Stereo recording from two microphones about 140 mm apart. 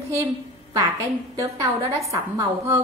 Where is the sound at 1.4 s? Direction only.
25° right (ahead or behind).